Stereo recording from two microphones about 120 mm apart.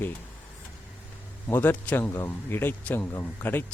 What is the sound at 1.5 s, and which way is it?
Speech, 15° left (ahead or behind).